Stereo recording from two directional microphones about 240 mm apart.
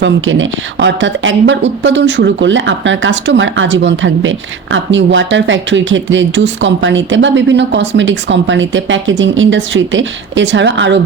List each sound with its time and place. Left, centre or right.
0.0 s speech: right